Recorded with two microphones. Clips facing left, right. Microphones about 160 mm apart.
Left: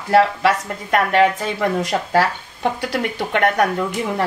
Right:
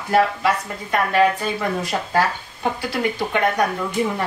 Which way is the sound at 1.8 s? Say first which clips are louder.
Left 2 dB; 90° left.